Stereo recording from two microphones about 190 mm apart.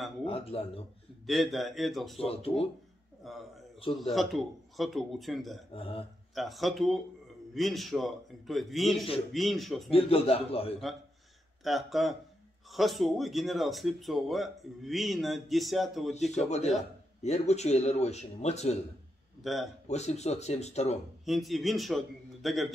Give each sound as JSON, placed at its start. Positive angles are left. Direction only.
{"t": 0.2, "sound": "speech", "side_deg": 30}
{"t": 1.2, "sound": "speech", "side_deg": 0}
{"t": 2.1, "sound": "speech", "side_deg": 30}
{"t": 3.2, "sound": "speech", "side_deg": 0}
{"t": 5.7, "sound": "speech", "side_deg": 30}
{"t": 6.3, "sound": "speech", "side_deg": 0}
{"t": 9.8, "sound": "speech", "side_deg": 30}
{"t": 11.6, "sound": "speech", "side_deg": 0}
{"t": 16.3, "sound": "speech", "side_deg": 35}
{"t": 19.4, "sound": "speech", "side_deg": 0}
{"t": 19.9, "sound": "speech", "side_deg": 35}
{"t": 21.3, "sound": "speech", "side_deg": 0}